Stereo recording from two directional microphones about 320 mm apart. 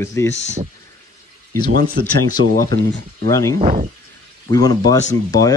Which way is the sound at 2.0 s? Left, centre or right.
Right.